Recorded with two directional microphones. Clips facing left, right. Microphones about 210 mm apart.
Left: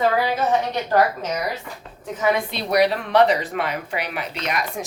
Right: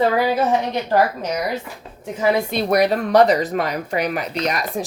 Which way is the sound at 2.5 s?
50° right (ahead or behind).